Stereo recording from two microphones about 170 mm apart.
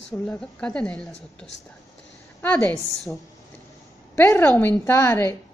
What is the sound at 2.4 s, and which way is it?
Speech, 10° left (ahead or behind).